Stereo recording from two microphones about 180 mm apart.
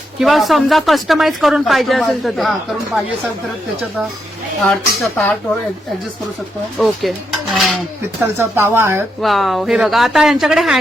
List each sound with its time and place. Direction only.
0.2 s speech: centre (ahead or behind)
4.6 s speech: 5° left (ahead or behind)
6.7 s speech: centre (ahead or behind)
8.4 s speech: 15° right (ahead or behind)
9.2 s speech: centre (ahead or behind)